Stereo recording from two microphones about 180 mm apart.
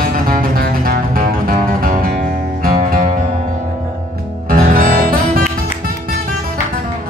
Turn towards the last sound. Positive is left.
turn(degrees=-55)  # may be behind; listen again after turning